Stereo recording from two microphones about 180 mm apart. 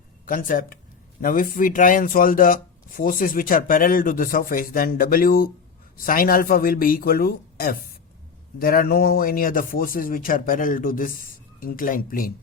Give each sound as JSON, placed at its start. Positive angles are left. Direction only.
{"t": 0.3, "sound": "speech", "side_deg": 50}